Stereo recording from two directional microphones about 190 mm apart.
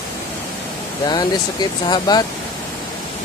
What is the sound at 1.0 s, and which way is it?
Speech, 20° left (ahead or behind).